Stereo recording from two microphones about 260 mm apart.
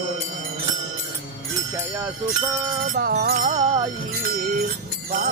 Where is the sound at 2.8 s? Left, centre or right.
Right.